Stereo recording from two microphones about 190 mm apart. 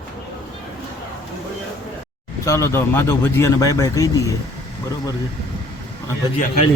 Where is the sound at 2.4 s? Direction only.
15° left (ahead or behind).